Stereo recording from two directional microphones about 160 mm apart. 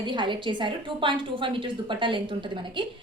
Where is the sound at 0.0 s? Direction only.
30° right (ahead or behind).